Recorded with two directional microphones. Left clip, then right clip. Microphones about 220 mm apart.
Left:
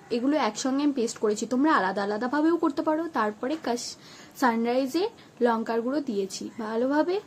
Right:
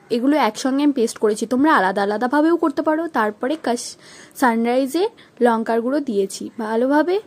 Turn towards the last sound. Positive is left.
turn(degrees=-35)  # may be behind; listen again after turning